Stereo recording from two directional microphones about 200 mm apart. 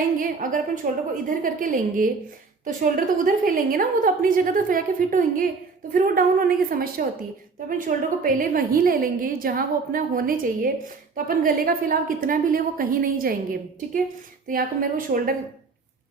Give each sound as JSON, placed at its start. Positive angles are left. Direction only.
{"t": 0.2, "sound": "a woman's voice", "side_deg": -45}